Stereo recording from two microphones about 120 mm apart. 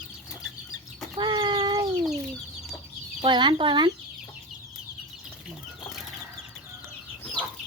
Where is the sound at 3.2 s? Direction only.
40° right (ahead or behind).